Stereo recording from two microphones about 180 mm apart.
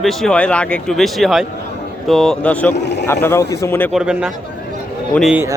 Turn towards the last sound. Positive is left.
turn(degrees=0)  # may be behind; listen again after turning